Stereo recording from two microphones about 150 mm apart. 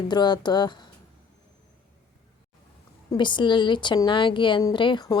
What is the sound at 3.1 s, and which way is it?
A woman's voice, 30° left (ahead or behind).